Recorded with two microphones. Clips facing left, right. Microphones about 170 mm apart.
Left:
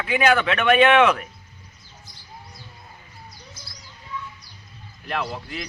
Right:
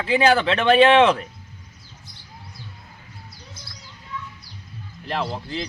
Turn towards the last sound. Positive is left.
turn(degrees=-30)  # may be behind; listen again after turning